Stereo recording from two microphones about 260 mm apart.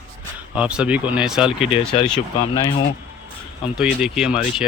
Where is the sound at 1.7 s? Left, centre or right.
Left.